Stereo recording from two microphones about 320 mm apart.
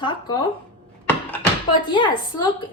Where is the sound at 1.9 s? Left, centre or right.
Centre.